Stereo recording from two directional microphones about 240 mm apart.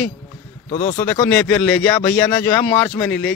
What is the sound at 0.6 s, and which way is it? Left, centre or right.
Speech, left.